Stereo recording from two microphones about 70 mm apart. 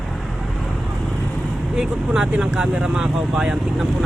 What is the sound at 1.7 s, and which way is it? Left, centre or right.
Speech, centre.